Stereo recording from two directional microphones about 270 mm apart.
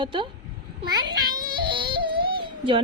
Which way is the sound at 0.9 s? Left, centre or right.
Centre.